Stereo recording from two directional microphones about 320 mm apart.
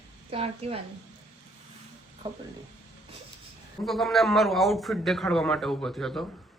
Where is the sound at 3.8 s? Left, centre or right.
Centre.